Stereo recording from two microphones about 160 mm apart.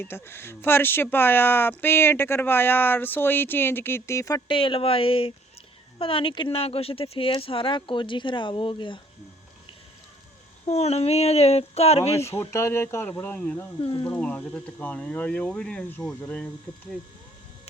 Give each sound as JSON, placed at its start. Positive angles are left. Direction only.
{"t": 0.0, "sound": "speech", "side_deg": 15}
{"t": 4.4, "sound": "speech", "side_deg": 35}
{"t": 10.7, "sound": "speech", "side_deg": 40}
{"t": 12.4, "sound": "speech", "side_deg": 15}
{"t": 13.8, "sound": "speech", "side_deg": 30}
{"t": 14.1, "sound": "speech", "side_deg": 10}